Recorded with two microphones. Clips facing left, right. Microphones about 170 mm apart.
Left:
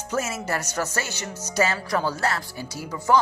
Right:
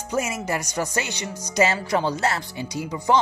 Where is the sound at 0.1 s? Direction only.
15° right (ahead or behind).